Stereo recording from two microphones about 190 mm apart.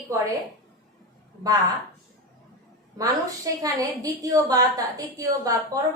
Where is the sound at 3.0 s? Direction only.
20° right (ahead or behind).